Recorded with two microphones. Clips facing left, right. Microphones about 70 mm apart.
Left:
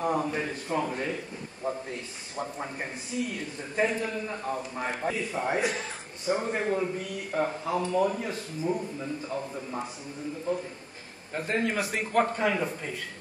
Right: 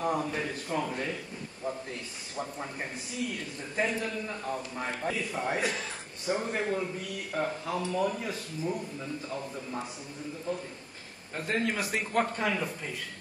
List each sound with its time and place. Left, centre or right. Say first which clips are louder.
0.0 s a man's voice: left 2 dB; centre
1.6 s a man's voice: left 3 dB; left
3.3 s a man's voice: left 4 dB; centre
4.3 s a man's voice: left 2 dB; centre
5.1 s a man's voice: left 3 dB; centre
11.3 s a man's voice: left 2 dB; centre